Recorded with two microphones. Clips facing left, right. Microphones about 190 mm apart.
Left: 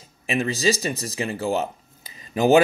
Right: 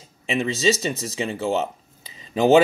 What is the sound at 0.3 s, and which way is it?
Speech, 25° right (ahead or behind).